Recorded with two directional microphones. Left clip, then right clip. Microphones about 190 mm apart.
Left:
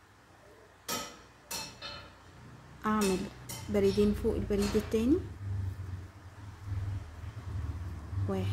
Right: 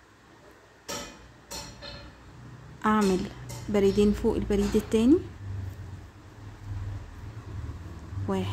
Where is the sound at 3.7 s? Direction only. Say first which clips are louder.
Right 5 dB; 20° right (ahead or behind).